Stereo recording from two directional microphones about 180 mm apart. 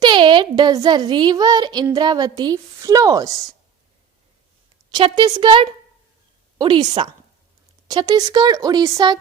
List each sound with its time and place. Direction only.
0.0 s a woman's voice: 25° right (ahead or behind)
4.9 s a woman's voice: 25° right (ahead or behind)
7.9 s a woman's voice: 20° right (ahead or behind)